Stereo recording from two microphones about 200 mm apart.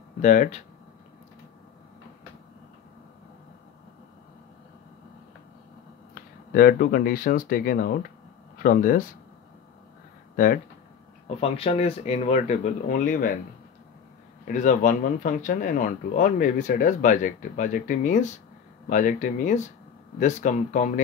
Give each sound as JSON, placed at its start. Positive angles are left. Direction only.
{"t": 0.2, "sound": "speech", "side_deg": 40}
{"t": 6.1, "sound": "speech", "side_deg": 50}
{"t": 10.3, "sound": "speech", "side_deg": 45}
{"t": 11.2, "sound": "speech", "side_deg": 30}
{"t": 14.5, "sound": "speech", "side_deg": 40}